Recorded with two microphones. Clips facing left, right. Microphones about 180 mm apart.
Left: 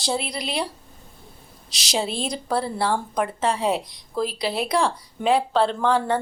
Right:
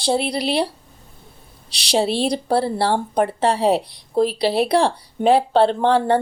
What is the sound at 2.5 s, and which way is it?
Speech, 30° right (ahead or behind).